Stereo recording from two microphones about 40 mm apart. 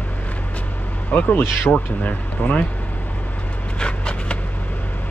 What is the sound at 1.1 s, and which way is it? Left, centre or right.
Speech, left.